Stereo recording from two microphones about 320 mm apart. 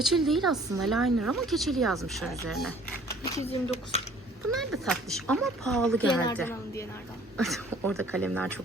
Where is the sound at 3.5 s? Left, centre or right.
Centre.